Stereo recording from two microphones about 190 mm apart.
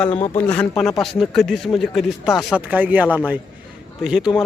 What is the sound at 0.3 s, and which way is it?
Speech, 5° left (ahead or behind).